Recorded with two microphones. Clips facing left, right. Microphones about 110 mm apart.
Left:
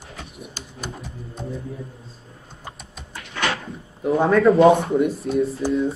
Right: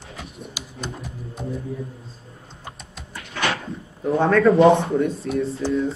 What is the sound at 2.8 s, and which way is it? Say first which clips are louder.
Vehicle: even; centre (ahead or behind).